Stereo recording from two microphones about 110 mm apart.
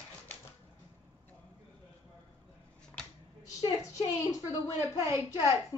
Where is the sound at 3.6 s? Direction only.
30° left (ahead or behind).